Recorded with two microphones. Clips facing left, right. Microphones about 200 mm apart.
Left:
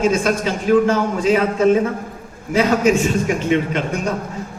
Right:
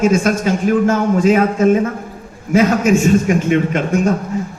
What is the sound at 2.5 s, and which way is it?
A man's voice, 45° right (ahead or behind).